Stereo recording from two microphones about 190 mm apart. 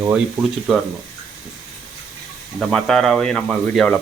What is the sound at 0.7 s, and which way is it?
Speech, centre (ahead or behind).